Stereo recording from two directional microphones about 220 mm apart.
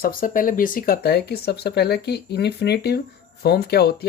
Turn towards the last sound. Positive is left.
turn(degrees=45)  # may be behind; listen again after turning